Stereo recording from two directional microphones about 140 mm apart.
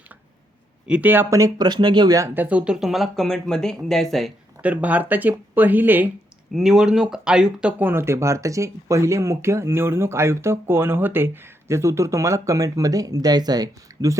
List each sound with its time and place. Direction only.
0.9 s speech: 10° right (ahead or behind)
4.6 s speech: 10° right (ahead or behind)
6.5 s speech: centre (ahead or behind); by 14.2 s 25° right (ahead or behind)